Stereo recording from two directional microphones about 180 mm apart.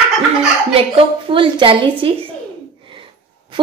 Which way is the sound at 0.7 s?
30° right (ahead or behind).